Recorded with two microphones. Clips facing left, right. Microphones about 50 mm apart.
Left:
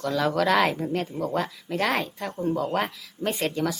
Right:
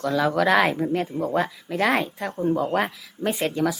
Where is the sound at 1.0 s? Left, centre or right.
Right.